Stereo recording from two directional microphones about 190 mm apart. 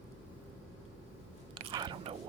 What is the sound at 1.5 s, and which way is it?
Whispering, 25° right (ahead or behind).